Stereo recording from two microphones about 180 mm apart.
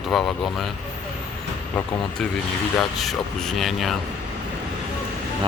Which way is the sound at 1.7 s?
10° left (ahead or behind).